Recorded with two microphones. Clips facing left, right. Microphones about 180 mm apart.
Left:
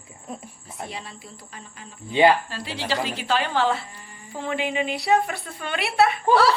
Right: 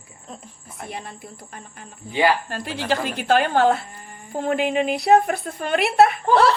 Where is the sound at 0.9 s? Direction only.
55° right (ahead or behind).